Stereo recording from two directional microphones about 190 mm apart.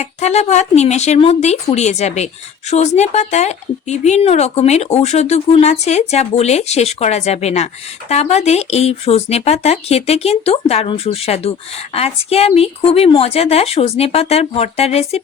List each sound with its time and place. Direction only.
0.0 s speech: 35° left (ahead or behind)